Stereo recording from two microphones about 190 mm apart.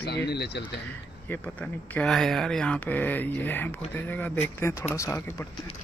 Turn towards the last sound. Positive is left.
turn(degrees=10)  # may be behind; listen again after turning